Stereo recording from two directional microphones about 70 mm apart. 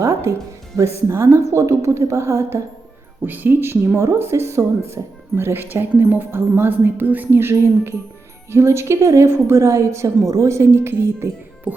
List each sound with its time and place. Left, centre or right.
0.0 s music: right
0.8 s a woman's voice: right
3.2 s a woman's voice: right